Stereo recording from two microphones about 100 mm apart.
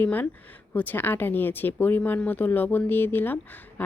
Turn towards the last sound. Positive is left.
turn(degrees=20)  # may be behind; listen again after turning